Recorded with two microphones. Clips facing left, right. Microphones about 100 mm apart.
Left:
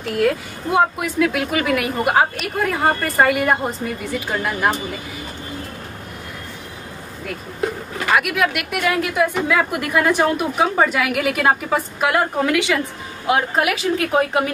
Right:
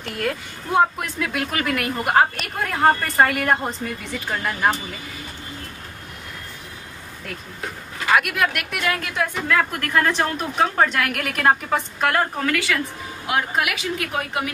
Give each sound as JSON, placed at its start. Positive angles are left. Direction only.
{"t": 0.0, "sound": "speech", "side_deg": 0}
{"t": 8.2, "sound": "a woman's voice", "side_deg": 0}
{"t": 13.3, "sound": "a woman's voice", "side_deg": 30}